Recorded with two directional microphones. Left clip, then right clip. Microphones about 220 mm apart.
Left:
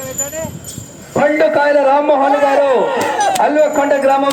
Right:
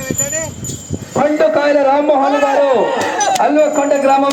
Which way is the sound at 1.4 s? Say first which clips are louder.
Even; 15° left (ahead or behind).